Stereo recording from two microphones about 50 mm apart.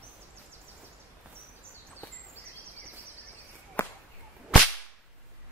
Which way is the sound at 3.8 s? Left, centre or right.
Left.